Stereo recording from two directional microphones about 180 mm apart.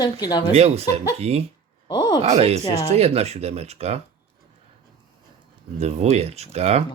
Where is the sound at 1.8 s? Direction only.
25° left (ahead or behind).